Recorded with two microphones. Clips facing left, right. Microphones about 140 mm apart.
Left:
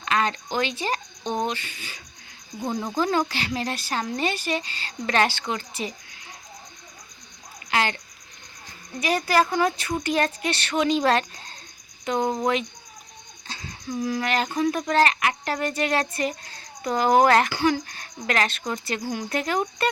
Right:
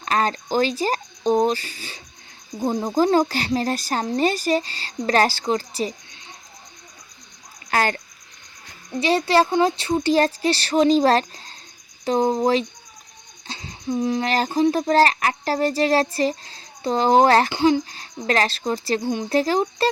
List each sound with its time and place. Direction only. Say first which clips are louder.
0.0 s speech: right 3 dB; 40° right (ahead or behind)
7.7 s speech: right 3 dB; 45° right (ahead or behind)
9.0 s speech: right 4 dB; 30° right (ahead or behind)